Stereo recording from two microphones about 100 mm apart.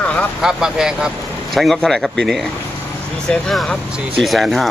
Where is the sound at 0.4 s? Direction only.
5° right (ahead or behind).